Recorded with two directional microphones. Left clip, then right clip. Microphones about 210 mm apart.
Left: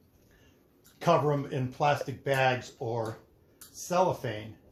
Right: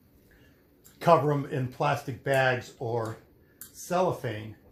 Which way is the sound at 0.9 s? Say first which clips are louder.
Right 3 dB; 35° right (ahead or behind).